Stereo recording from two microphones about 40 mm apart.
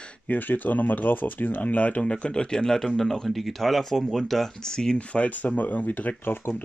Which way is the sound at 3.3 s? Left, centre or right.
Centre.